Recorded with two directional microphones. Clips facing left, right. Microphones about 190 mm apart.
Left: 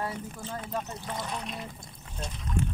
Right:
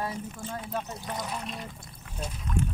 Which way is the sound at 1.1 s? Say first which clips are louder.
Even; 5° right (ahead or behind).